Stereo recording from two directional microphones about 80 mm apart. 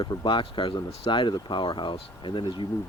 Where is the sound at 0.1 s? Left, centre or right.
Left.